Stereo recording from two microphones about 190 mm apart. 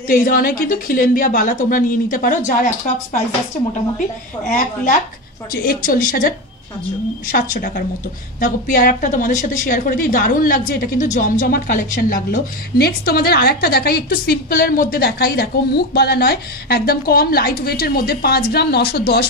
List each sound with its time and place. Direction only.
0.1 s a woman's voice: 45° left (ahead or behind)
4.5 s a woman's voice: 45° left (ahead or behind); by 19.2 s 60° left (ahead or behind)